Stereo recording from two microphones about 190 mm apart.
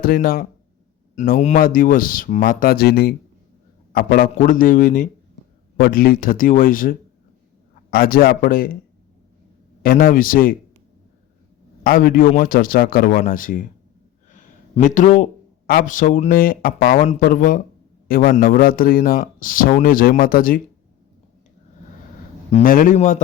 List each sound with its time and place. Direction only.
0.0 s speech: 50° left (ahead or behind)
9.8 s speech: 50° left (ahead or behind)
11.8 s a man's voice: 50° left (ahead or behind)
22.5 s speech: 45° left (ahead or behind)